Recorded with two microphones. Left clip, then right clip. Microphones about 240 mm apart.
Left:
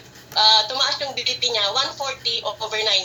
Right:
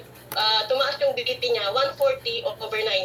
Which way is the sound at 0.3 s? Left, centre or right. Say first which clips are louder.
Left 5 dB; centre.